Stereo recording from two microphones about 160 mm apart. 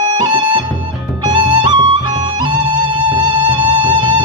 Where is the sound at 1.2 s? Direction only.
30° right (ahead or behind).